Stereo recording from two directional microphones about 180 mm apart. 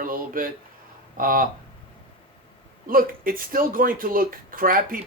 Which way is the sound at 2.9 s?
50° right (ahead or behind).